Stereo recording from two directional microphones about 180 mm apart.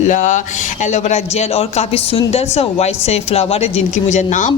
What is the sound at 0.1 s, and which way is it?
A woman's voice, 45° left (ahead or behind).